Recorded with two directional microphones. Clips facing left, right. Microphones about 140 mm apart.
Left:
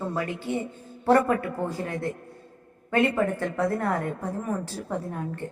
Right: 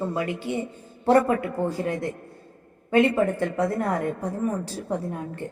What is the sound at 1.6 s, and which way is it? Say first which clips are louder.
Speech: right 4 dB; 20° right (ahead or behind).